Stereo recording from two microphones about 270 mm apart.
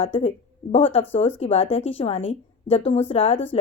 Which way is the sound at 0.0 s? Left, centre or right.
Left.